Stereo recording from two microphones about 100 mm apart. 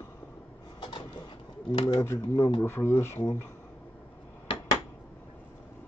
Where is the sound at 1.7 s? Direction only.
55° left (ahead or behind).